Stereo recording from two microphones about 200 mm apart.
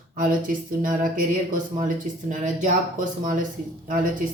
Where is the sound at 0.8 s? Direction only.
40° right (ahead or behind).